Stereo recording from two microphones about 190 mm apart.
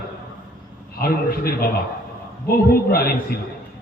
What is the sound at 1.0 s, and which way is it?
A man's voice, 55° left (ahead or behind).